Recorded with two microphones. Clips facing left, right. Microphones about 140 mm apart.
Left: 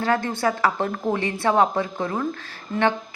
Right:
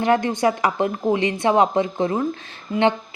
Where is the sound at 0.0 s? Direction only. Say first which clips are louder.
Right 4 dB; 20° right (ahead or behind).